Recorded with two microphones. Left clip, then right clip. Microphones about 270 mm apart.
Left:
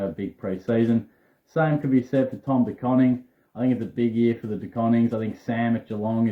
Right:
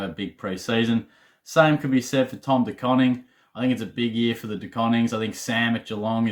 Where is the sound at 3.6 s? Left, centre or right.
Centre.